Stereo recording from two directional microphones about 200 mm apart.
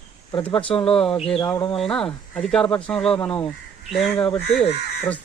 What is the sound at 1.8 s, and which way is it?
Speech, 5° left (ahead or behind).